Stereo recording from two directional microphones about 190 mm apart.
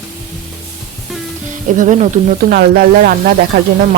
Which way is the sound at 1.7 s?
40° right (ahead or behind).